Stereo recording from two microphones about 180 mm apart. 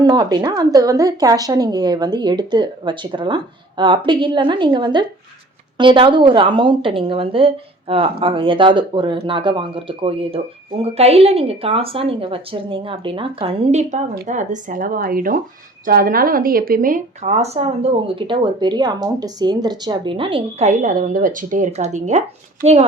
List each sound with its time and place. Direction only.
0.0 s a woman's voice: 25° right (ahead or behind)